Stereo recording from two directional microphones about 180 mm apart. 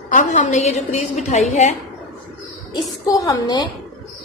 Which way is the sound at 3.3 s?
25° left (ahead or behind).